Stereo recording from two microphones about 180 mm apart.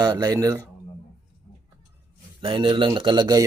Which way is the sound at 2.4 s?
25° right (ahead or behind).